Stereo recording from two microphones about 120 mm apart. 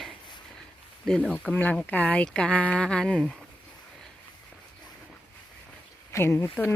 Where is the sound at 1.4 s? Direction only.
10° left (ahead or behind).